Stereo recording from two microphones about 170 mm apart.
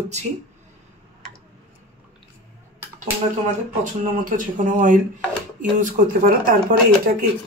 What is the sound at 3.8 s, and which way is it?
A woman's voice, 50° right (ahead or behind).